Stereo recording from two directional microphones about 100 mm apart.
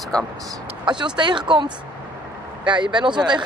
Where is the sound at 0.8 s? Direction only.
50° right (ahead or behind).